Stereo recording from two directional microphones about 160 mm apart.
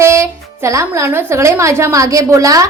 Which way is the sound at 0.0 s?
15° right (ahead or behind).